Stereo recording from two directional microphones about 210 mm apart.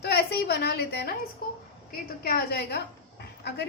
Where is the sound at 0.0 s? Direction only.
50° left (ahead or behind).